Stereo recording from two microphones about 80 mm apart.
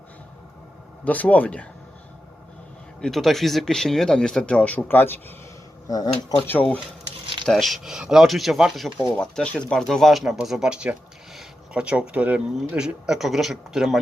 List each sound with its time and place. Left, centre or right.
1.0 s speech: centre
3.0 s speech: centre; by 5.2 s left
5.9 s speech: left
6.4 s speech: left
7.4 s speech: centre
9.1 s speech: centre